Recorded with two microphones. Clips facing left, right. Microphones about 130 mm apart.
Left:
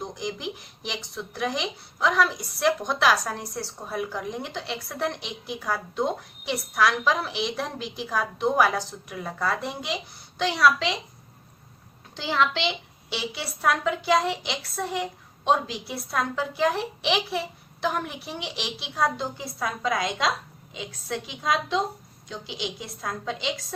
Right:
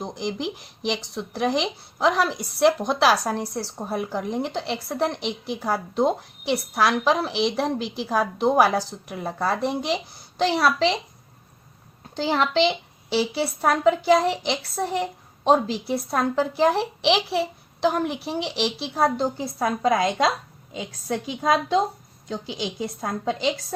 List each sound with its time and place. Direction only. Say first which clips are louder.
0.0 s speech: right 4 dB; 30° right (ahead or behind)
12.1 s speech: right 4 dB; 40° right (ahead or behind)